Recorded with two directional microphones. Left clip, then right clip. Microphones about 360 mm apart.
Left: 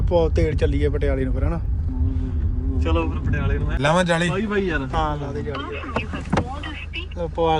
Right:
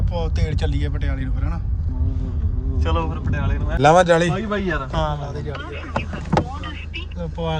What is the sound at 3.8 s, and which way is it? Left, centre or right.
Speech, right.